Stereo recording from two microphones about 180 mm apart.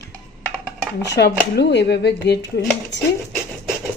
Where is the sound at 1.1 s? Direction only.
70° left (ahead or behind).